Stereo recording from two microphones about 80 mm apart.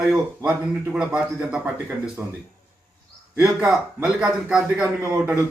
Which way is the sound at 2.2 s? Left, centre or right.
Right.